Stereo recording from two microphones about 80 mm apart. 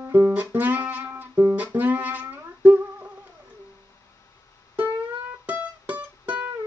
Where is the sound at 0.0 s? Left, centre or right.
Right.